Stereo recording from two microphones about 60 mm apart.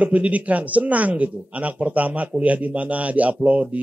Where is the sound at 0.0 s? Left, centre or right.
Right.